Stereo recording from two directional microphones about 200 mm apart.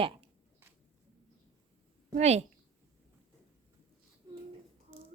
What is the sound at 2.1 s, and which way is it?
Speech, 35° right (ahead or behind).